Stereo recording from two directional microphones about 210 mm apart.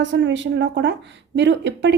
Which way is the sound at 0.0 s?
60° right (ahead or behind).